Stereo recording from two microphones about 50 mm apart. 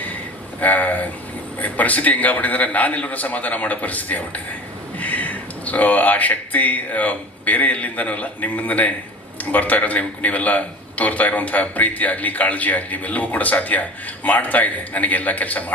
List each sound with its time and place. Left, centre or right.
0.6 s a man's voice: left